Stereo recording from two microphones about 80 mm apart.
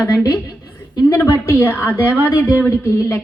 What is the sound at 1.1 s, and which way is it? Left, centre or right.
A woman's voice, left.